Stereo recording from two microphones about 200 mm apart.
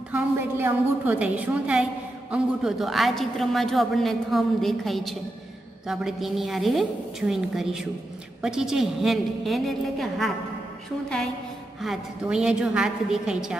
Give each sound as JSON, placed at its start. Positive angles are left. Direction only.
{"t": 0.1, "sound": "a woman's voice", "side_deg": -10}
{"t": 11.8, "sound": "a man's voice", "side_deg": -5}